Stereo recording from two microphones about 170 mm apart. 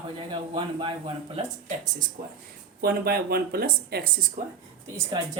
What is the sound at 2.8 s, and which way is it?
Speech, 65° right (ahead or behind).